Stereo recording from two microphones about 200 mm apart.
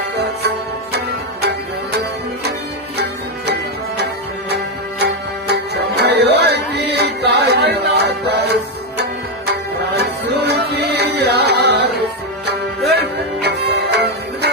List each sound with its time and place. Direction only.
3.0 s music: 55° right (ahead or behind)